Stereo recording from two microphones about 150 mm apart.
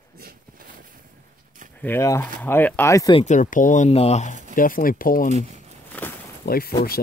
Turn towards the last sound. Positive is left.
turn(degrees=90)